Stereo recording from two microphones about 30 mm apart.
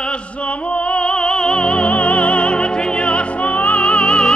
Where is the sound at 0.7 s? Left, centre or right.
Left.